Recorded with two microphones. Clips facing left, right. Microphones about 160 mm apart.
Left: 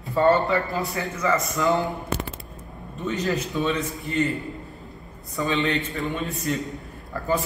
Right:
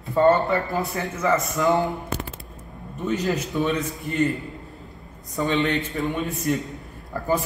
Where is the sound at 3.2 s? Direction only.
20° right (ahead or behind).